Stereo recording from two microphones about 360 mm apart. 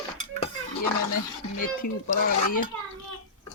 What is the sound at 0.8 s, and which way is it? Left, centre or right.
Speech, left.